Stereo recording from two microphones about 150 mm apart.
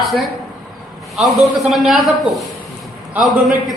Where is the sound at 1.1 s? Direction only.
Centre (ahead or behind).